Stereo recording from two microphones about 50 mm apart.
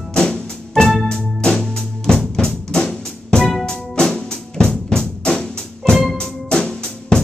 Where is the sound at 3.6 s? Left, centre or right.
Centre.